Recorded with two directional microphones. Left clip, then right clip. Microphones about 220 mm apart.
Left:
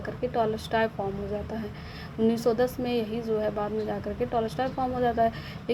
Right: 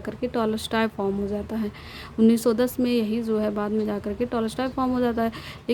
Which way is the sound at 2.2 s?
40° right (ahead or behind).